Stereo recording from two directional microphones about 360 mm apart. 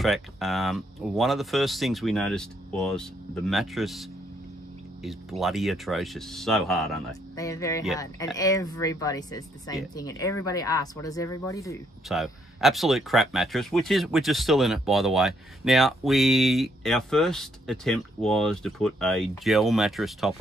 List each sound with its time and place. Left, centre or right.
0.0 s speech: centre